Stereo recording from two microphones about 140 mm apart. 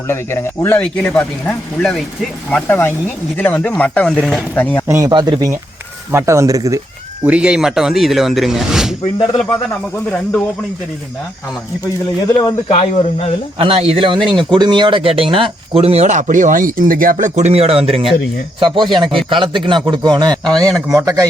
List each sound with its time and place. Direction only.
0.1 s speech: 15° left (ahead or behind)
4.9 s speech: 20° right (ahead or behind)
7.3 s speech: 10° right (ahead or behind)
10.1 s speech: 10° left (ahead or behind)
12.6 s speech: 50° left (ahead or behind)
13.6 s speech: 45° right (ahead or behind)
20.4 s speech: 5° left (ahead or behind)
20.9 s speech: 25° right (ahead or behind)